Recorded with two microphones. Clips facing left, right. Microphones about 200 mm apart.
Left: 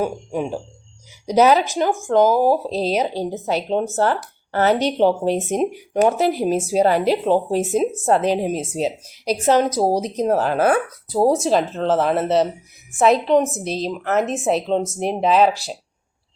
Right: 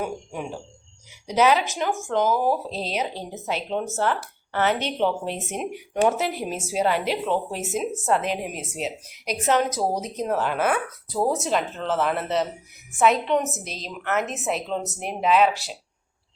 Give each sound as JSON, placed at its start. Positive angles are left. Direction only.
{"t": 1.3, "sound": "speech", "side_deg": 40}